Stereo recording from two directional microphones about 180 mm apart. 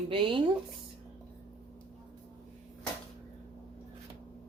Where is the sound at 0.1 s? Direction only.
30° right (ahead or behind).